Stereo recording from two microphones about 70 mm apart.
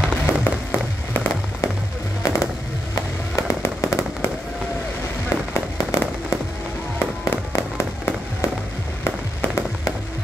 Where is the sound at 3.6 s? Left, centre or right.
Left.